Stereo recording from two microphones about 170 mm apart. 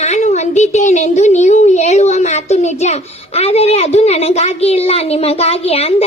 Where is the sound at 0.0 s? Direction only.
40° left (ahead or behind).